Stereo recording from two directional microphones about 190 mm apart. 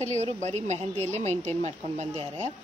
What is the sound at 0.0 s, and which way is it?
Speech, 35° right (ahead or behind).